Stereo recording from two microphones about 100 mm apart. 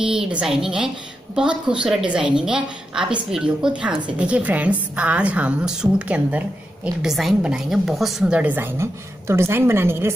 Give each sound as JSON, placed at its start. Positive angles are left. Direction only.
{"t": 0.0, "sound": "a woman's voice", "side_deg": -10}